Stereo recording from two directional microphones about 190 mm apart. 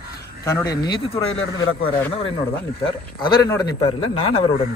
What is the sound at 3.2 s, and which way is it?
Speech, 20° left (ahead or behind).